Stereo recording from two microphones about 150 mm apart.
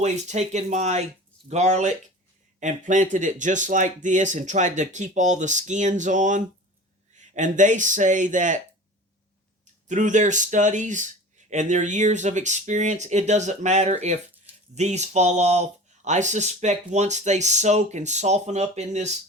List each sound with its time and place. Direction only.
0.0 s speech: 50° right (ahead or behind)
9.8 s speech: 55° right (ahead or behind)